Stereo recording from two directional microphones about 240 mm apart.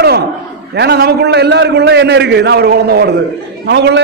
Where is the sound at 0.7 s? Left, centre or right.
Right.